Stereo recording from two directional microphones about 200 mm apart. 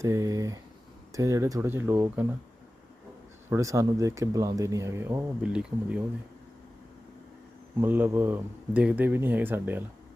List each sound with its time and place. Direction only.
0.0 s speech: 15° right (ahead or behind)
3.5 s speech: 15° right (ahead or behind)
7.8 s speech: 10° right (ahead or behind)